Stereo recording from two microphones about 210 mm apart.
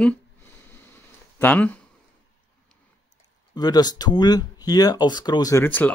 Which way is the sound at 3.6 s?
20° left (ahead or behind).